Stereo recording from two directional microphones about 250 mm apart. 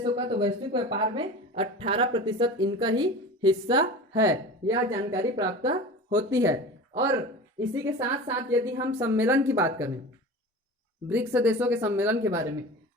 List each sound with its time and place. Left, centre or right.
0.0 s a woman's voice: centre
11.1 s a woman's voice: centre